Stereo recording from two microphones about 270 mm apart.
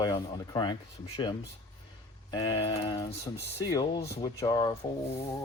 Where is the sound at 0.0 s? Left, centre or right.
Centre.